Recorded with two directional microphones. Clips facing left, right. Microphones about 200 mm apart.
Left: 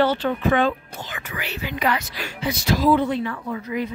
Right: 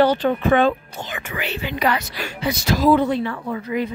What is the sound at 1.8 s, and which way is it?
Speech, 35° right (ahead or behind).